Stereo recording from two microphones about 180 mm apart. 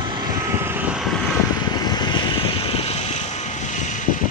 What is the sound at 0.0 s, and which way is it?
Vehicle, 25° right (ahead or behind).